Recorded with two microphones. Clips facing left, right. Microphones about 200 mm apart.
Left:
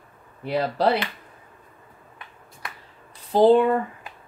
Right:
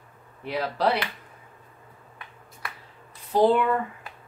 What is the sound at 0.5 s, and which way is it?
Speech, 35° left (ahead or behind).